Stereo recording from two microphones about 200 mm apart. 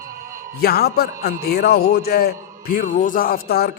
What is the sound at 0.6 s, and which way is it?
A man's voice, 50° left (ahead or behind).